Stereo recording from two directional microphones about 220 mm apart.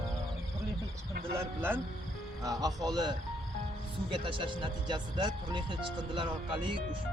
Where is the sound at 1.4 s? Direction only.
10° right (ahead or behind).